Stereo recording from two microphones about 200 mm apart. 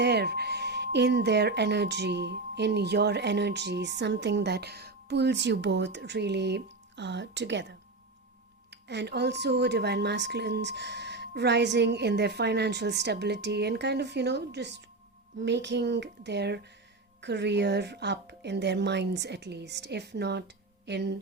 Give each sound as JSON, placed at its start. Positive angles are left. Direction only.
{"t": 0.0, "sound": "speech", "side_deg": -55}